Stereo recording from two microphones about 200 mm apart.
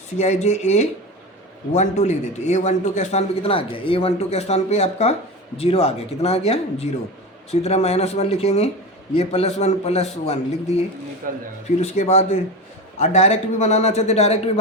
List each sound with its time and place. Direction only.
0.2 s a man's voice: 35° left (ahead or behind)
11.2 s speech: 45° right (ahead or behind)
11.8 s a man's voice: 35° left (ahead or behind)